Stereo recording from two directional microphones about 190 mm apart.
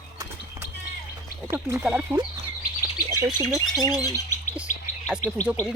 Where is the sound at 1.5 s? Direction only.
10° right (ahead or behind).